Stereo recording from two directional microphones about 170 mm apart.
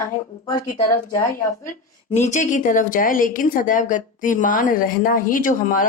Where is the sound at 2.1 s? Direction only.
45° left (ahead or behind).